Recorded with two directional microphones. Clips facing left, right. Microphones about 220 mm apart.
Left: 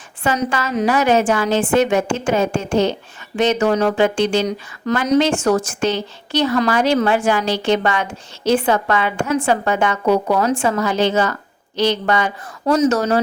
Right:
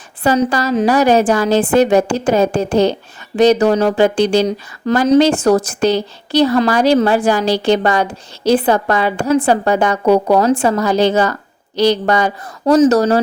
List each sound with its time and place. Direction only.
0.2 s speech: 35° right (ahead or behind)